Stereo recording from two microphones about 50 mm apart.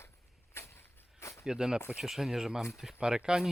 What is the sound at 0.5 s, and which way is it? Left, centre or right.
Vehicle, left.